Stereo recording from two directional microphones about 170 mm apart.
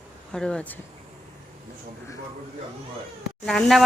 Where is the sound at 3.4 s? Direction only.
5° left (ahead or behind).